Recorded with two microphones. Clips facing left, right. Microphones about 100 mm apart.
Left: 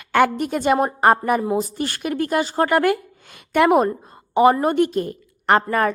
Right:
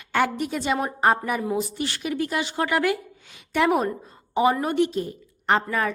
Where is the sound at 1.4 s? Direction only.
35° left (ahead or behind).